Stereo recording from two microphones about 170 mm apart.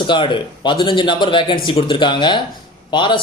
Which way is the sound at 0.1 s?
30° left (ahead or behind).